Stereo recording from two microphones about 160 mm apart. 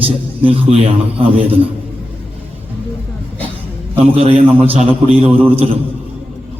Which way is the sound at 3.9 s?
35° right (ahead or behind).